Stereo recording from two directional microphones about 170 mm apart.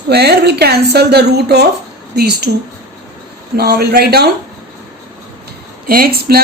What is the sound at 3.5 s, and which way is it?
Speech, 70° right (ahead or behind).